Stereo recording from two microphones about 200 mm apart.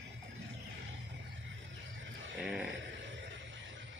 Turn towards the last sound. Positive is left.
turn(degrees=-65)  # may be behind; listen again after turning